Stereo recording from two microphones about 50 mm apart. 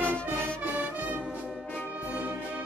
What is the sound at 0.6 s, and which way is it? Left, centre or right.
Music, right.